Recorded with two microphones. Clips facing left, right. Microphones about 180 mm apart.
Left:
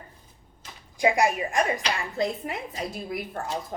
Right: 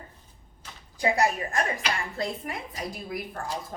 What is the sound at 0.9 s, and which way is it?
A woman's voice, 15° left (ahead or behind).